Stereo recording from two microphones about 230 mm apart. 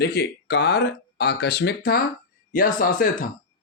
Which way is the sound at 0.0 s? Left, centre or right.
Left.